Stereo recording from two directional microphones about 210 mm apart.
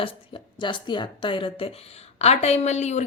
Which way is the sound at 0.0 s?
25° left (ahead or behind).